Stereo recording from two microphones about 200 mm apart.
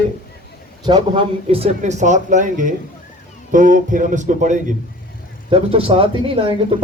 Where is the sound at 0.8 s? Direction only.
25° right (ahead or behind).